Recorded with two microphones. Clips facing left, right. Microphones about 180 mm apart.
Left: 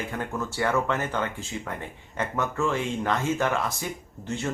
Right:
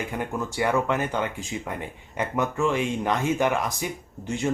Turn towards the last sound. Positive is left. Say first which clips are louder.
# right 4 dB
turn(degrees=-15)  # may be behind; listen again after turning